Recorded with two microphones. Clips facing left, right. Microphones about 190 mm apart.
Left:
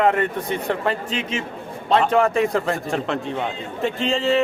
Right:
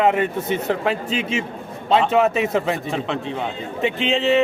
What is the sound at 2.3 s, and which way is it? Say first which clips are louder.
Speech: left 1 dB; 20° right (ahead or behind).